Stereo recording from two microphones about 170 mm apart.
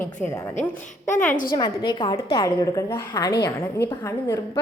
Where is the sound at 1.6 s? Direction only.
25° left (ahead or behind).